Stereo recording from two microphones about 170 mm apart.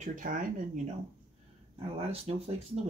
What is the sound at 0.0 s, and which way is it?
Speech, 50° right (ahead or behind).